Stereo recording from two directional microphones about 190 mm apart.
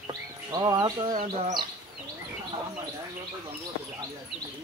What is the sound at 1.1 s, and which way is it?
Speech, 40° right (ahead or behind).